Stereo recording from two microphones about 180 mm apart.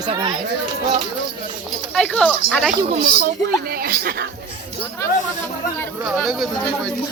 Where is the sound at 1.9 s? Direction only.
5° left (ahead or behind).